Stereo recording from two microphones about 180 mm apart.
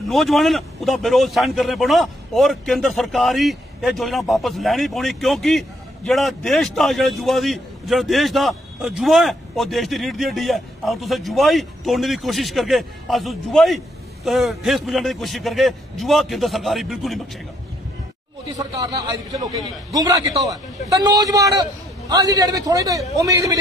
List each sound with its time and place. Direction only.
0.1 s a man's voice: centre (ahead or behind)
18.5 s a man's voice: 20° right (ahead or behind)